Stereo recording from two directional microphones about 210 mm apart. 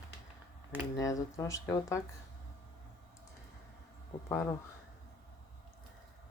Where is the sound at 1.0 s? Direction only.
15° left (ahead or behind).